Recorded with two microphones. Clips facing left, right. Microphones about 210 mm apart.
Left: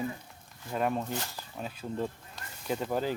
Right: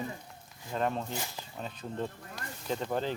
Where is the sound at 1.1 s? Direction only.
10° right (ahead or behind).